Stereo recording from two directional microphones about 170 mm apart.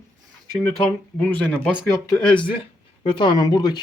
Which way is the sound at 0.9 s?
10° left (ahead or behind).